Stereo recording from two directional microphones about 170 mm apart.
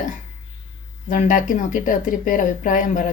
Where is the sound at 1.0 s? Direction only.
50° left (ahead or behind).